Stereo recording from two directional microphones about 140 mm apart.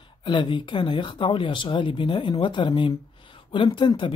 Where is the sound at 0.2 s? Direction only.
35° left (ahead or behind).